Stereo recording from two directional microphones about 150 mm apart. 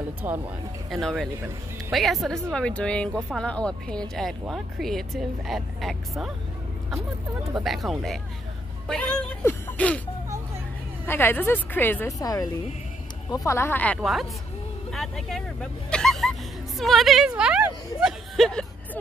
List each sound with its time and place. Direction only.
0.2 s speech: 15° right (ahead or behind)
0.8 s a woman's voice: centre (ahead or behind)
7.5 s speech: centre (ahead or behind)
11.1 s a woman's voice: 15° left (ahead or behind)
14.9 s speech: centre (ahead or behind)